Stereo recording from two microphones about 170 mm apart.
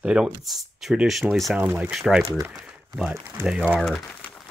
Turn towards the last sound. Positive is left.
turn(degrees=5)  # may be behind; listen again after turning